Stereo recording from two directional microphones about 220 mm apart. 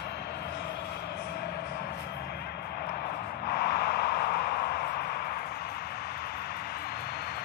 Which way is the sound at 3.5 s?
45° left (ahead or behind).